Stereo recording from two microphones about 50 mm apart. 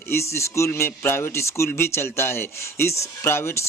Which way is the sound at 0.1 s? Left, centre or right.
Left.